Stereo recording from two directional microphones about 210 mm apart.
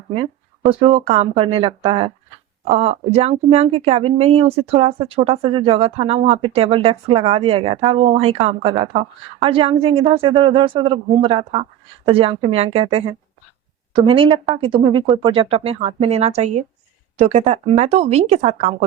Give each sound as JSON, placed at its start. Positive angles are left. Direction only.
{"t": 0.7, "sound": "speech", "side_deg": -25}